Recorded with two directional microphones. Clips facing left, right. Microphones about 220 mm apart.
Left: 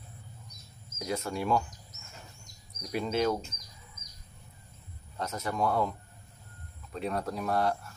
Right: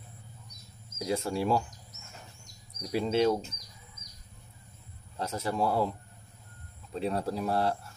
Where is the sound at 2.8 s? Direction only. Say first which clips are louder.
Right 3 dB; 30° right (ahead or behind).